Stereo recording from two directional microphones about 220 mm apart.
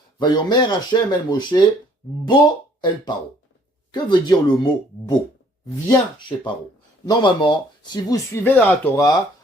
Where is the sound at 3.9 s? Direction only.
20° left (ahead or behind).